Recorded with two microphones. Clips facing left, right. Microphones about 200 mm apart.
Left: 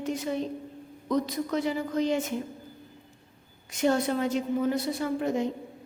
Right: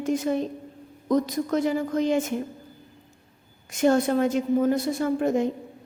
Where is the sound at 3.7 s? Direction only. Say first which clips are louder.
Right 5 dB; 50° right (ahead or behind).